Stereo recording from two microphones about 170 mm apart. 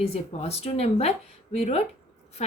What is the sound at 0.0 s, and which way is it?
A woman's voice, 35° left (ahead or behind).